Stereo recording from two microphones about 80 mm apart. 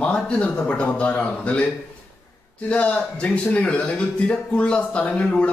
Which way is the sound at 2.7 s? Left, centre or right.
Centre.